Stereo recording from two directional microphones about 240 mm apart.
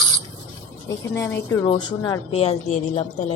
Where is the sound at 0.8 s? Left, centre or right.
Centre.